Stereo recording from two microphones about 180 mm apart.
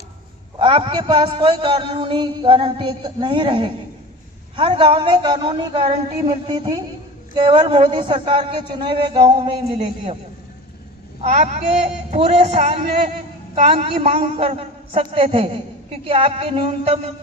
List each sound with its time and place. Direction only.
0.6 s a man's voice: 25° right (ahead or behind)
9.7 s a man's voice: 40° right (ahead or behind)
11.2 s a child's voice: 40° right (ahead or behind)